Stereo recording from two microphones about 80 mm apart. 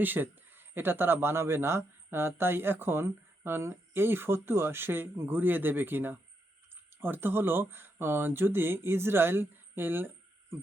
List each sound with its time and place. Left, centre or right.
0.0 s speech: right